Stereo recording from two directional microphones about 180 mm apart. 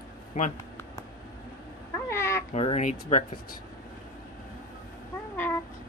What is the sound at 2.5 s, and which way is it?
Speech, 35° left (ahead or behind).